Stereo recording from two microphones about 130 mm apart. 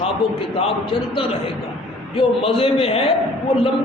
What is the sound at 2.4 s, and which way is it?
Speech, 45° left (ahead or behind).